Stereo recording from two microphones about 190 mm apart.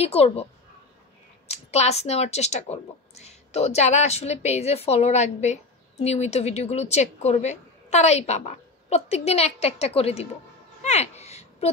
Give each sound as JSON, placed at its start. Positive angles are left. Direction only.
{"t": 0.0, "sound": "speech", "side_deg": 30}
{"t": 1.5, "sound": "speech", "side_deg": 35}
{"t": 10.8, "sound": "a sound", "side_deg": 35}